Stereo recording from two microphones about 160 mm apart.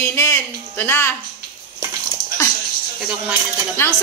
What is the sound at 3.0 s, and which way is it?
Speech, 5° right (ahead or behind).